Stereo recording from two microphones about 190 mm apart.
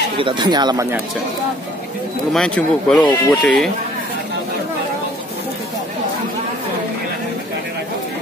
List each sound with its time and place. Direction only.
0.2 s speech: 25° right (ahead or behind)
2.3 s speech: centre (ahead or behind)